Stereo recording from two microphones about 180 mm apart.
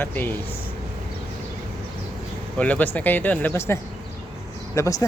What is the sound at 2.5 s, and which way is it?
Speech, 10° left (ahead or behind).